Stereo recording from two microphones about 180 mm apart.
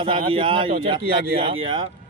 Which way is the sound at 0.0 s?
30° right (ahead or behind).